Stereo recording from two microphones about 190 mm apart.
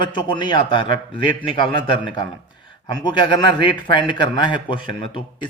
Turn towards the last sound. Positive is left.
turn(degrees=25)  # may be behind; listen again after turning